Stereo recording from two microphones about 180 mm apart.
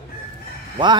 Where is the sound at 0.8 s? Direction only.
25° right (ahead or behind).